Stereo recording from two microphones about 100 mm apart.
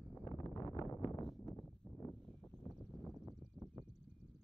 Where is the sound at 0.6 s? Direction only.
40° left (ahead or behind).